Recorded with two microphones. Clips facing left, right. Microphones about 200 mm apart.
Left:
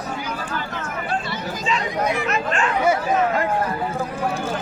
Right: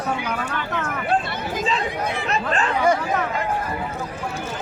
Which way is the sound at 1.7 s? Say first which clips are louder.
Left 5 dB; 35° right (ahead or behind).